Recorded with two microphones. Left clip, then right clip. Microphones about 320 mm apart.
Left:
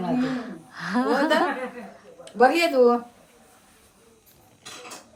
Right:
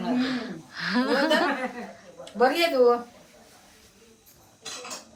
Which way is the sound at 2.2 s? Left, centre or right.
Left.